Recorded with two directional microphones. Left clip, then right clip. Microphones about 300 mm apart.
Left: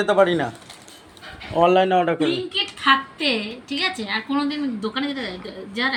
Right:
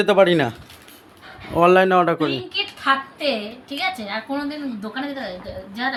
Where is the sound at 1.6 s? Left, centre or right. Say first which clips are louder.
Right 2 dB; centre.